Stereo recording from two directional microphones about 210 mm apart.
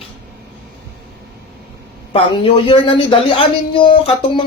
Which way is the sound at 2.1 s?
25° left (ahead or behind).